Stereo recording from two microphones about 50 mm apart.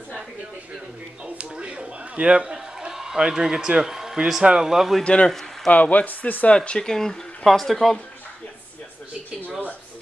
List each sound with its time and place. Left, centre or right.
1.2 s a sound: right
4.5 s a man's voice: centre
5.0 s a man's voice: left
5.7 s speech: left
6.5 s speech: centre